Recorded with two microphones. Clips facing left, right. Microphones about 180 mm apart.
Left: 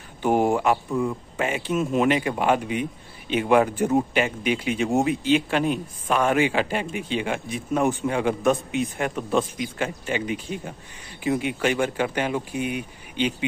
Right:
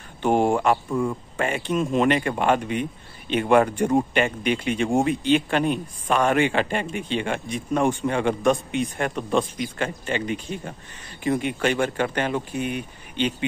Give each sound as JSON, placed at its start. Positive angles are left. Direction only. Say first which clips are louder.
{"t": 0.2, "sound": "speech", "louder": "right 1 dB", "side_deg": 10}